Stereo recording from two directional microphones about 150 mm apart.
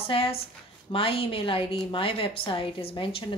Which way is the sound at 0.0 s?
40° left (ahead or behind).